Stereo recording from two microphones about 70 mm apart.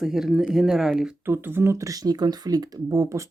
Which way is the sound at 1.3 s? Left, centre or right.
Right.